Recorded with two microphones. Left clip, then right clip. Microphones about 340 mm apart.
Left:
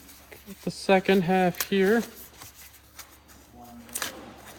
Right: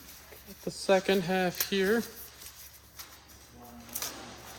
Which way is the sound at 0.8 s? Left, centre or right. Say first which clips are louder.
Left 4 dB; left.